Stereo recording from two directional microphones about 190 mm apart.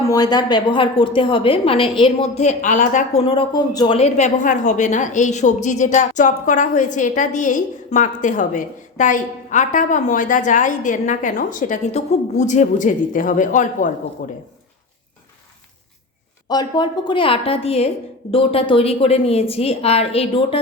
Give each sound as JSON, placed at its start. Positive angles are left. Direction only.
{"t": 0.0, "sound": "a woman's voice", "side_deg": 20}
{"t": 3.9, "sound": "a woman's voice", "side_deg": 35}
{"t": 16.5, "sound": "a woman's voice", "side_deg": 20}